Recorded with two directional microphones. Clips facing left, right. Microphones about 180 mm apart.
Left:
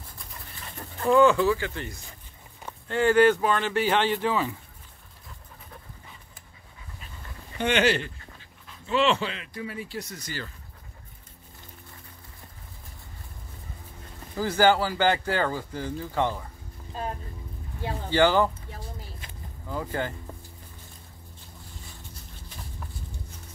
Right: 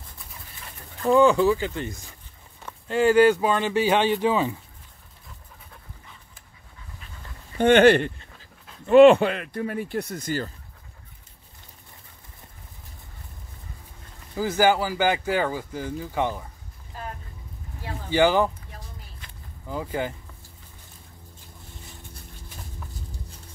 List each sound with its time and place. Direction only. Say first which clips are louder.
1.1 s speech: right 2 dB; 15° right (ahead or behind)
7.5 s speech: right 8 dB; 50° right (ahead or behind)
14.3 s speech: right 1 dB; 10° right (ahead or behind)
17.0 s boat: left 4 dB; 25° left (ahead or behind)
18.1 s speech: right 1 dB; 10° right (ahead or behind)
19.7 s speech: right 2 dB; 15° right (ahead or behind)